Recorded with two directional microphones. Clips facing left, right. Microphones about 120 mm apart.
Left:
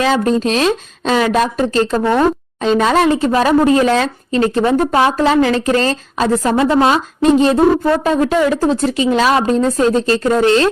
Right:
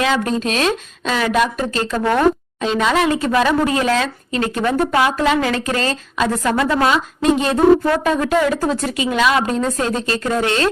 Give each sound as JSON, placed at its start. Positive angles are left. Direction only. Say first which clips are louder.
{"t": 0.0, "sound": "speech", "louder": "left 4 dB", "side_deg": 35}